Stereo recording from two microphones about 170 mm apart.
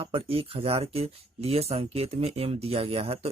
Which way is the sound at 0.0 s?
35° right (ahead or behind).